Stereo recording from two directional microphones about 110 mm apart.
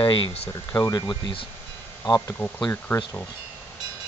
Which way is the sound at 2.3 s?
20° left (ahead or behind).